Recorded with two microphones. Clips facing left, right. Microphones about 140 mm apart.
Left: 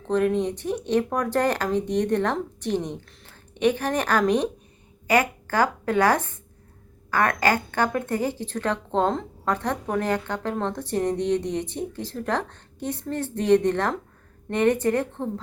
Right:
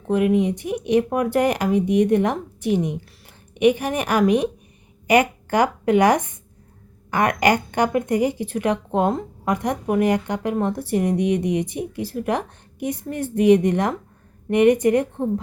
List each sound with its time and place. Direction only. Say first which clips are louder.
0.1 s a woman's voice: right 3 dB; 10° right (ahead or behind)